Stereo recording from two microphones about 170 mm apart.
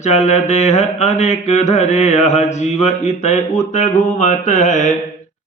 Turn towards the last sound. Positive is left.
turn(degrees=45)  # may be behind; listen again after turning